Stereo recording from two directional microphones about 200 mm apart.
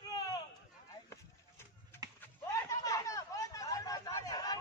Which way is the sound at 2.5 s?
15° left (ahead or behind).